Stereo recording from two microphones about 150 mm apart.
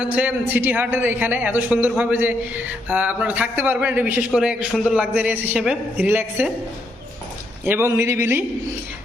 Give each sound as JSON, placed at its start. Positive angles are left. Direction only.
{"t": 0.0, "sound": "a man's voice", "side_deg": -10}
{"t": 7.6, "sound": "a man's voice", "side_deg": -15}